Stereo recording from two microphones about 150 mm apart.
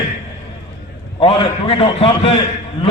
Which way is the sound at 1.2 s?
35° left (ahead or behind).